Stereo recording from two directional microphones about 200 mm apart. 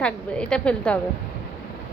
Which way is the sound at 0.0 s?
5° left (ahead or behind).